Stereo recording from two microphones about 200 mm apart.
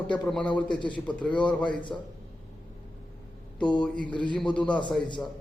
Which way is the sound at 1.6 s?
25° left (ahead or behind).